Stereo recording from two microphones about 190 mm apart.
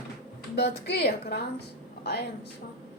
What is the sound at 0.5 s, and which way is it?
Speech, 60° left (ahead or behind).